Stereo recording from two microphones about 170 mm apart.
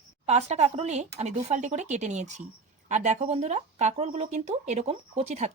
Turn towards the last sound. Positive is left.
turn(degrees=-40)  # may be behind; listen again after turning